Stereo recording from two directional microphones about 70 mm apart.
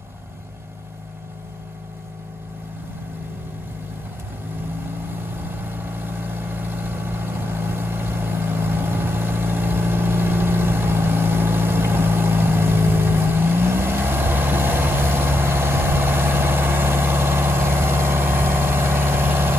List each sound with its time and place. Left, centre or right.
5.4 s vehicle: right